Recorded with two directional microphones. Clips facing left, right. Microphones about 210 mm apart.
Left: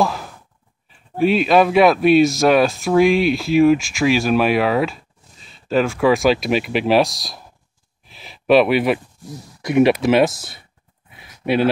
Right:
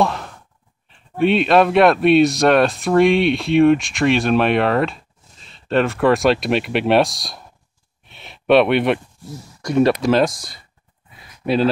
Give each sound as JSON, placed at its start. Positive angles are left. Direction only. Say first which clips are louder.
{"t": 0.0, "sound": "sigh", "louder": "right 1 dB", "side_deg": 5}
{"t": 0.8, "sound": "speech", "louder": "even", "side_deg": 5}
{"t": 8.0, "sound": "a sound", "louder": "even", "side_deg": 0}
{"t": 9.7, "sound": "speech", "louder": "left 1 dB", "side_deg": 20}
{"t": 11.4, "sound": "speech", "louder": "even", "side_deg": 65}